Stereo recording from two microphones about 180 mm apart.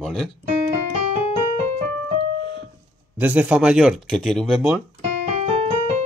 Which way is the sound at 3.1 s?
10° right (ahead or behind).